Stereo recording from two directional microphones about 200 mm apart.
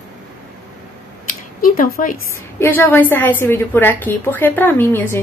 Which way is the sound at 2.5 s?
10° left (ahead or behind).